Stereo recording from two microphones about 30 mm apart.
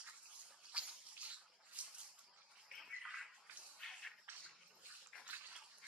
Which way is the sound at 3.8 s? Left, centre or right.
Centre.